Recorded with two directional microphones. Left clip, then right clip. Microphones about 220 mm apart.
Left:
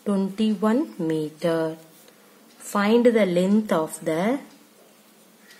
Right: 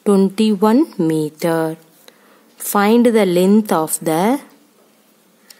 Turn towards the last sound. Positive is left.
turn(degrees=-50)  # may be behind; listen again after turning